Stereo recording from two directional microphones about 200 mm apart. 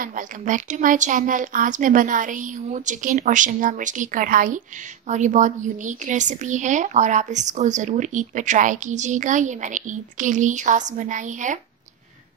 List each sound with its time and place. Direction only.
0.0 s speech: 40° right (ahead or behind)